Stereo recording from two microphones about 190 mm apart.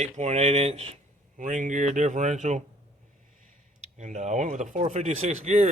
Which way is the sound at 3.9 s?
40° right (ahead or behind).